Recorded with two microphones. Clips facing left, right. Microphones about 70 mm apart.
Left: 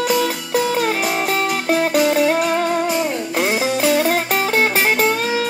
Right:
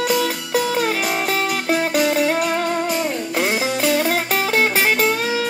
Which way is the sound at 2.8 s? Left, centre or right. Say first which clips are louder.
Left 2 dB; centre.